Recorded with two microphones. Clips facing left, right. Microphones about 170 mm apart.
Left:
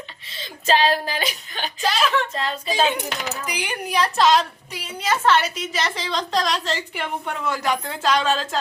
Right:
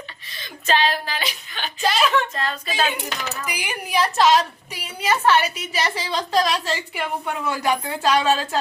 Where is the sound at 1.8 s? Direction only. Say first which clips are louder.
Right 2 dB; centre (ahead or behind).